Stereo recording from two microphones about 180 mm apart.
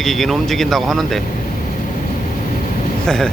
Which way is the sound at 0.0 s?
Centre (ahead or behind).